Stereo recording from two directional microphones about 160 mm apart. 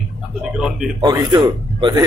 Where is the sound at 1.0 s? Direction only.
25° right (ahead or behind).